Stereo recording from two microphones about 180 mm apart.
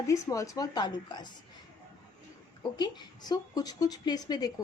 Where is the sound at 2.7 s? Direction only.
20° left (ahead or behind).